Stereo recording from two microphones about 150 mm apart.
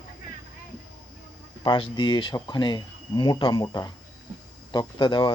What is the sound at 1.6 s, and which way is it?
Speech, 35° left (ahead or behind).